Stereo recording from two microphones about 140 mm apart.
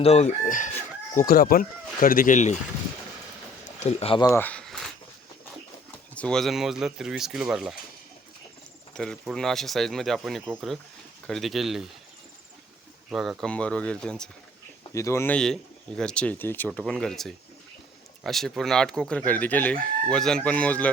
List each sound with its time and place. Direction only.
0.0 s chicken: 50° left (ahead or behind)
1.3 s speech: 90° left; by 2.6 s 60° left (ahead or behind)
3.8 s speech: 45° left (ahead or behind)
4.3 s a sound: 10° left (ahead or behind)
6.1 s speech: 5° left (ahead or behind)
9.0 s speech: 5° left (ahead or behind)
13.1 s chicken: centre (ahead or behind)
14.9 s speech: 20° left (ahead or behind)
16.0 s chicken: 5° left (ahead or behind)